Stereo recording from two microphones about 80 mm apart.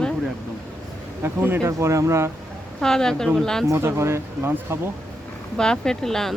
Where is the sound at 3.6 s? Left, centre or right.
Right.